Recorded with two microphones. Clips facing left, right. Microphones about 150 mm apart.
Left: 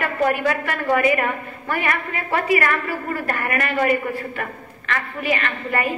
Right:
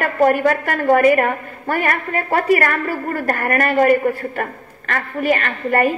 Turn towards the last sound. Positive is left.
turn(degrees=-45)  # may be behind; listen again after turning